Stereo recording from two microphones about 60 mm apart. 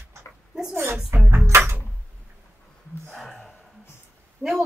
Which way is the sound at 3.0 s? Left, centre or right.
Centre.